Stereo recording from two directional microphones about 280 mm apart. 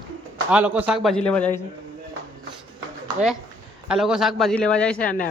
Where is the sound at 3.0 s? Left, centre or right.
Centre.